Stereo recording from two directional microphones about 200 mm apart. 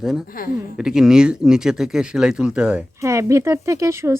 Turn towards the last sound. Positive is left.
turn(degrees=-15)  # may be behind; listen again after turning